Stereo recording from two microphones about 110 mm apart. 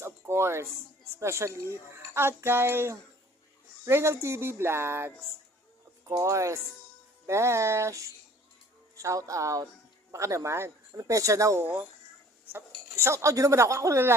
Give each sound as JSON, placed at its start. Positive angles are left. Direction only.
{"t": 0.0, "sound": "a sound", "side_deg": -25}
{"t": 1.1, "sound": "speech", "side_deg": -25}
{"t": 11.6, "sound": "speech", "side_deg": -15}